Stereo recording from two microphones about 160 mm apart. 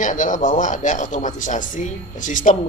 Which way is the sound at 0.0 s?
55° left (ahead or behind).